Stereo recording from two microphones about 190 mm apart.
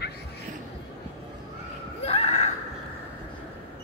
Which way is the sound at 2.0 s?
30° left (ahead or behind).